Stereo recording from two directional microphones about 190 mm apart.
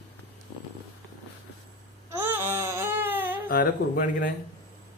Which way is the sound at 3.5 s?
50° left (ahead or behind).